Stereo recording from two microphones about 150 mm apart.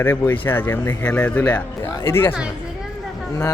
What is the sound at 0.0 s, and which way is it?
Speech, 15° left (ahead or behind).